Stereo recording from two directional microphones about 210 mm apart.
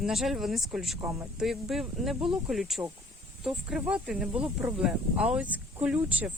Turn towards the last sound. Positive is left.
turn(degrees=-5)  # may be behind; listen again after turning